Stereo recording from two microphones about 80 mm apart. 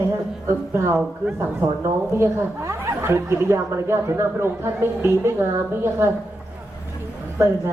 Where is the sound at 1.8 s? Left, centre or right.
Right.